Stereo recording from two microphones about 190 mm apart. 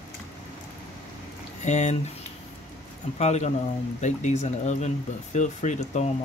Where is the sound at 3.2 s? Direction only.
35° left (ahead or behind).